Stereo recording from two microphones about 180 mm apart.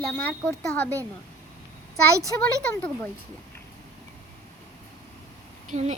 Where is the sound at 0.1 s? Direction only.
10° left (ahead or behind).